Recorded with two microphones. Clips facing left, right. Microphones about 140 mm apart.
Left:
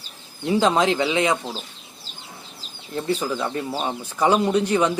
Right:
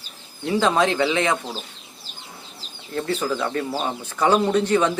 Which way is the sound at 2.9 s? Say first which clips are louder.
Even; 10° left (ahead or behind).